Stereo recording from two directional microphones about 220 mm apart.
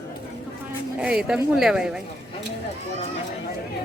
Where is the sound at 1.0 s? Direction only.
5° right (ahead or behind).